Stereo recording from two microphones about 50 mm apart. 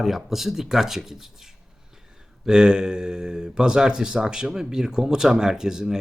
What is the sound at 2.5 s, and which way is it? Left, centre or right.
Speech, centre.